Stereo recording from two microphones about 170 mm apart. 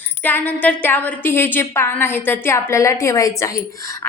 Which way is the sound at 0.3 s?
10° left (ahead or behind).